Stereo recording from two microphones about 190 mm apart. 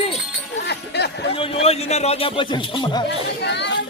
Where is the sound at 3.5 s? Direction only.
65° left (ahead or behind).